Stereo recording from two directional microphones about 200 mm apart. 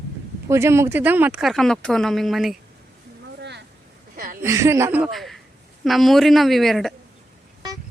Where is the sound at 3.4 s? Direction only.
60° right (ahead or behind).